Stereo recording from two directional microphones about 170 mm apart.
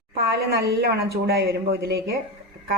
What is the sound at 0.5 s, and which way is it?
Speech, 70° right (ahead or behind).